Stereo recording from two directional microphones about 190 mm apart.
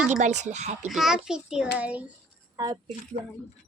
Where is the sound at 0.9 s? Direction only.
Centre (ahead or behind).